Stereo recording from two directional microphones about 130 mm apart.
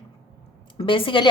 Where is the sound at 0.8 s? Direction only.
40° left (ahead or behind).